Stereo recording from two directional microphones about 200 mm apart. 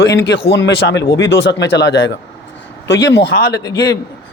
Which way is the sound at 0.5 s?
55° left (ahead or behind).